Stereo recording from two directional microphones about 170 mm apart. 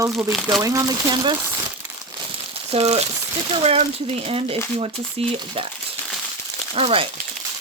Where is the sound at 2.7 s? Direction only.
35° right (ahead or behind).